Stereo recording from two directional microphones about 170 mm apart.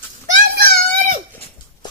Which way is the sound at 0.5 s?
65° right (ahead or behind).